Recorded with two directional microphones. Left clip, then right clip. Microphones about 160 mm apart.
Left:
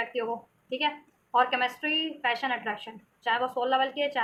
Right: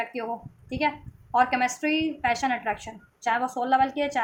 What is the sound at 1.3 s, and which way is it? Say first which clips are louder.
A woman's voice: right 2 dB; 50° right (ahead or behind).